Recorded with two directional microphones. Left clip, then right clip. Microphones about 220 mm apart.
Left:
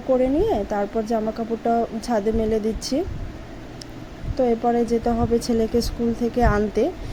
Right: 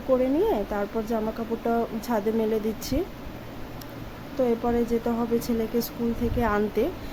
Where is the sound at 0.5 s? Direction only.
10° left (ahead or behind).